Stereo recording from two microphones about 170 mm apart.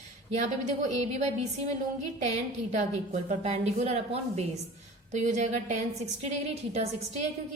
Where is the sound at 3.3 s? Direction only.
40° right (ahead or behind).